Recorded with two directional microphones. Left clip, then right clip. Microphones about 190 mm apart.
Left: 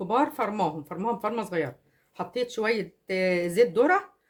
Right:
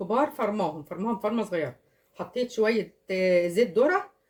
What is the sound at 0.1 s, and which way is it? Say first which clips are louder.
A woman's voice: even; 45° left (ahead or behind).